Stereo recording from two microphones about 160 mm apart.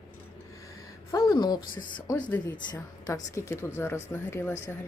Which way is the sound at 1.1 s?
20° left (ahead or behind).